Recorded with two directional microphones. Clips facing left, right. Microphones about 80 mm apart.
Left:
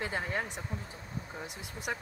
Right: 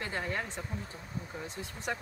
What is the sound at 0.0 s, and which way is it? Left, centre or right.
Speech, centre.